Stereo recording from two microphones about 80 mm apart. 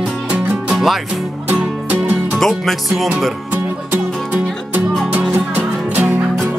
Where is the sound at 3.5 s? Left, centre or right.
Right.